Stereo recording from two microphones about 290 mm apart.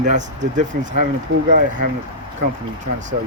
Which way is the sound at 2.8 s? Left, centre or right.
Right.